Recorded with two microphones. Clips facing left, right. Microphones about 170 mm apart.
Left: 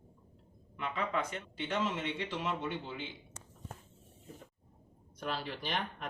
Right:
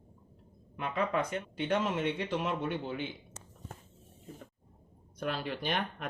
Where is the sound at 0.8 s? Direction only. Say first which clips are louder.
Right 4 dB; 55° right (ahead or behind).